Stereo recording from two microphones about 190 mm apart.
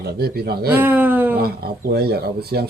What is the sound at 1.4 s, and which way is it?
A man's voice, 55° right (ahead or behind).